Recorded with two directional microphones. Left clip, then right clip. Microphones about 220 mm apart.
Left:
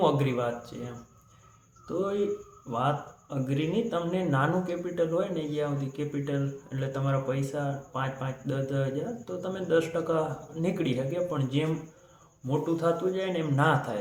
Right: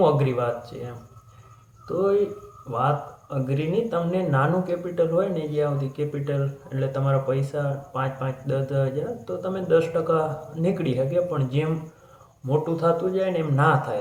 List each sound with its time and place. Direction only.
0.0 s speech: 20° left (ahead or behind)
2.7 s speech: 20° left (ahead or behind)